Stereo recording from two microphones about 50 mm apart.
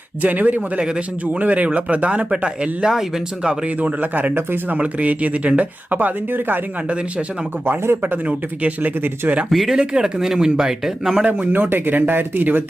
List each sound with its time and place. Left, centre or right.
0.2 s speech: right
0.8 s speech: centre
1.2 s speech: right
2.8 s speech: centre
3.8 s speech: right
6.8 s speech: right
7.6 s speech: right
8.0 s speech: right
9.0 s speech: right
9.5 s speech: centre
9.7 s speech: centre
11.3 s speech: right